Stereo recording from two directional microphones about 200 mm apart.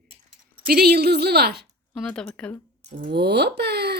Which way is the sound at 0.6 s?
50° right (ahead or behind).